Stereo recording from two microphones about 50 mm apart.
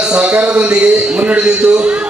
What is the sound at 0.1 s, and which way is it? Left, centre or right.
Speech, right.